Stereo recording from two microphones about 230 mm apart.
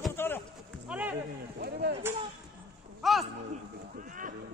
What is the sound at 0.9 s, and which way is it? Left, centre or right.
Speech, centre.